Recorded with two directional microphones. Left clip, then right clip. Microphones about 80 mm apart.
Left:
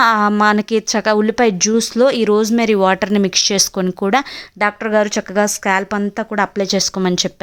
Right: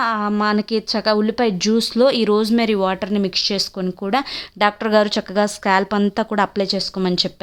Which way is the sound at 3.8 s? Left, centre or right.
Left.